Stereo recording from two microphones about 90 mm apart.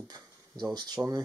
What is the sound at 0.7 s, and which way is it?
Speech, 55° right (ahead or behind).